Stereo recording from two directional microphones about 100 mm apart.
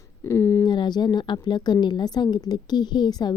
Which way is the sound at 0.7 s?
50° left (ahead or behind).